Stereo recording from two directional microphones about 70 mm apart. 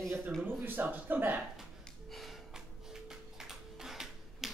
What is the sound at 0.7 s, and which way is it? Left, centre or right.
Speech, right.